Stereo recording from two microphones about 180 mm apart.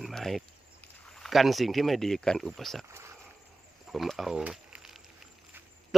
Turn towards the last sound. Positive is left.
turn(degrees=0)  # may be behind; listen again after turning